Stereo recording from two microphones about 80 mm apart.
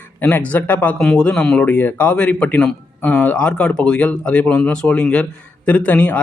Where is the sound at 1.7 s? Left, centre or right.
Left.